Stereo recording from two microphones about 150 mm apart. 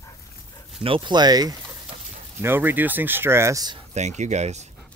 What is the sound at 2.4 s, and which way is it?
Speech, 15° right (ahead or behind).